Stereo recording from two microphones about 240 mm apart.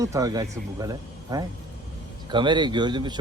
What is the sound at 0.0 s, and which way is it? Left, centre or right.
Speech, centre.